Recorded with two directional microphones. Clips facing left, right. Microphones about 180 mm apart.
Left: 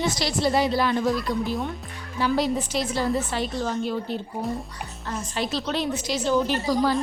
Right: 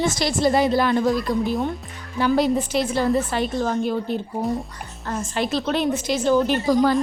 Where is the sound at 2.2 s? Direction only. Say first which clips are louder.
Right 4 dB; 55° right (ahead or behind).